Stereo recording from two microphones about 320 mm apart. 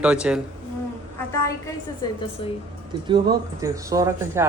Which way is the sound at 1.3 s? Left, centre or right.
Centre.